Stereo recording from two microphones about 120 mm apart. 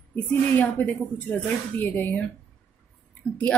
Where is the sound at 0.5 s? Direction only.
15° left (ahead or behind).